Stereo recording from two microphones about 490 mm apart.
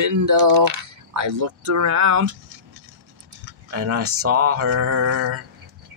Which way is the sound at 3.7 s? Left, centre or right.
Right.